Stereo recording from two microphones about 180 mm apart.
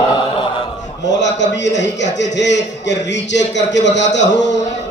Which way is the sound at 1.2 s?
80° left.